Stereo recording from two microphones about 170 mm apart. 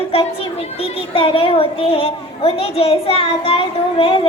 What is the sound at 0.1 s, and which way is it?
A child's voice, 35° left (ahead or behind).